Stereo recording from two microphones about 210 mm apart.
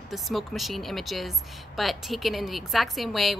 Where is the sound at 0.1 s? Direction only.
Centre (ahead or behind).